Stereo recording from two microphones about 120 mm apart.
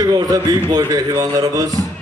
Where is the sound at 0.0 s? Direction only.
30° right (ahead or behind).